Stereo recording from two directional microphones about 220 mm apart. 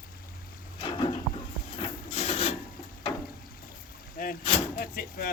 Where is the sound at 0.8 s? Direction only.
25° left (ahead or behind).